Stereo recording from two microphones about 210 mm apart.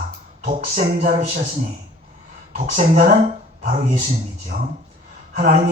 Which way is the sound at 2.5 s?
35° right (ahead or behind).